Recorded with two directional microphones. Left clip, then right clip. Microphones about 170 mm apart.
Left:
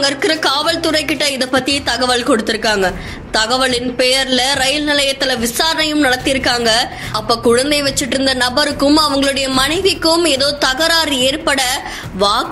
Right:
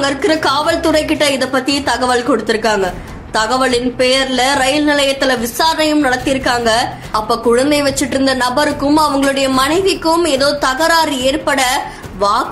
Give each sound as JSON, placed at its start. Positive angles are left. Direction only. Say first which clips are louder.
{"t": 0.0, "sound": "a woman's voice", "louder": "right 1 dB", "side_deg": 15}